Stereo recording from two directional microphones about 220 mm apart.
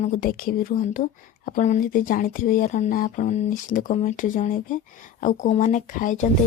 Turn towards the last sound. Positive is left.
turn(degrees=35)  # may be behind; listen again after turning